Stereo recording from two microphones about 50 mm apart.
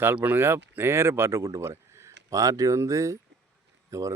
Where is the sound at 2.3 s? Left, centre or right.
Right.